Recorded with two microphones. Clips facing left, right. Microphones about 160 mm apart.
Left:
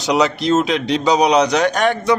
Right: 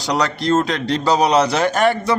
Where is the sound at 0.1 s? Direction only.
Centre (ahead or behind).